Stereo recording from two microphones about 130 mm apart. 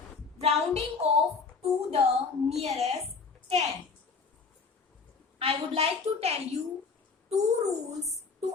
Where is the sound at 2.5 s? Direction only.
55° right (ahead or behind).